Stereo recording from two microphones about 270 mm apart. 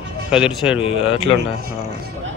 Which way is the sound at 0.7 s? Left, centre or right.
Left.